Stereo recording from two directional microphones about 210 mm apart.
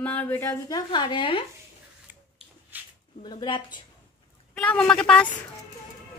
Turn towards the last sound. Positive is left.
turn(degrees=5)  # may be behind; listen again after turning